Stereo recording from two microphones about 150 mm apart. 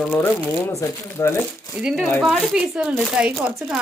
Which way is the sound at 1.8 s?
5° right (ahead or behind).